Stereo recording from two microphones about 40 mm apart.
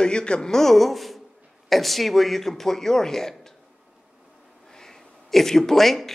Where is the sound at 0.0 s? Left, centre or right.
Left.